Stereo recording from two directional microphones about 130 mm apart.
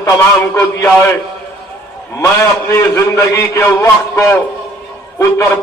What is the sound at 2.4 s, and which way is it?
A man's voice, 20° left (ahead or behind).